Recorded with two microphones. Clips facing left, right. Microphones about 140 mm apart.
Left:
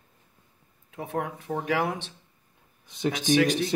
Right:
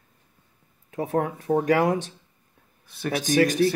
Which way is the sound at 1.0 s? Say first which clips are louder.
Right 6 dB; 40° right (ahead or behind).